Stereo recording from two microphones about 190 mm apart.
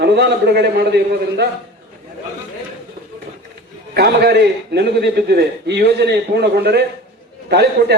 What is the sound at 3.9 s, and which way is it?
A man's voice, 60° right (ahead or behind).